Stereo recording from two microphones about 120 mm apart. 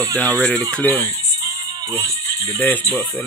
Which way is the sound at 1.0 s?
25° right (ahead or behind).